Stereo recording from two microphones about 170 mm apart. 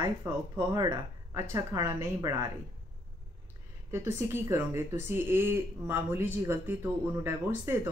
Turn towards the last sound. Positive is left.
turn(degrees=-15)  # may be behind; listen again after turning